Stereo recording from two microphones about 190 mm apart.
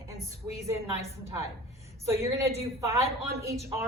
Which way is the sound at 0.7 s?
15° right (ahead or behind).